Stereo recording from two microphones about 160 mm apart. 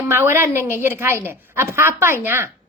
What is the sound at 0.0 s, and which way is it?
A woman's voice, 15° right (ahead or behind).